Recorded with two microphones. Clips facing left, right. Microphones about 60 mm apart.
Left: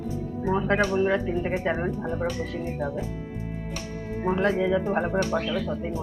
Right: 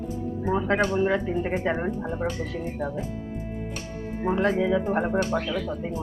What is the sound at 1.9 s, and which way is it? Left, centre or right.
Speech, right.